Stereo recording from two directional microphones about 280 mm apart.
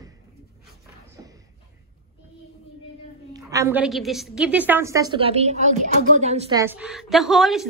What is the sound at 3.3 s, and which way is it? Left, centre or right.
A woman's voice, centre.